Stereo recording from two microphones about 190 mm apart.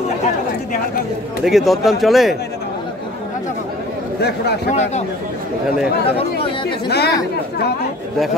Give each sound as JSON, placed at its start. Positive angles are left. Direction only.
{"t": 1.4, "sound": "speech", "side_deg": 0}
{"t": 4.6, "sound": "a man's voice", "side_deg": 35}
{"t": 6.9, "sound": "speech", "side_deg": 60}